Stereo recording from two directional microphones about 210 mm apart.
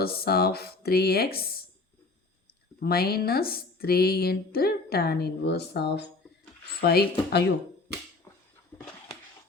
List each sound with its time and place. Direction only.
0.0 s a woman's voice: 45° left (ahead or behind)
2.8 s a woman's voice: 45° left (ahead or behind)
8.7 s a sound: 10° left (ahead or behind)